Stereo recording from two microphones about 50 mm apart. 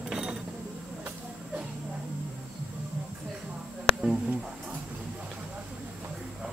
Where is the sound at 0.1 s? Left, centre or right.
Centre.